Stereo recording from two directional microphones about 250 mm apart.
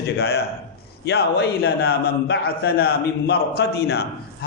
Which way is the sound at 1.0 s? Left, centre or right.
Left.